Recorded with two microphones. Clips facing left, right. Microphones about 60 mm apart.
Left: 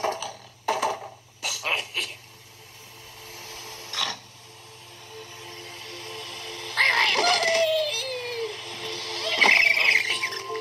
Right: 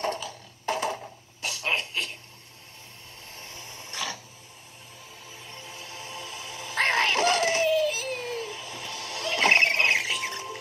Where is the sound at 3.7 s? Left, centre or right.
Right.